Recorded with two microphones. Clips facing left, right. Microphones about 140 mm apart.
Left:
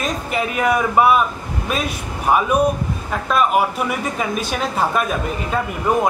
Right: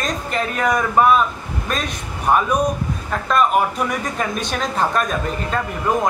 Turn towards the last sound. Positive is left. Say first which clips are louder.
# left 2 dB
turn(degrees=10)  # may be behind; listen again after turning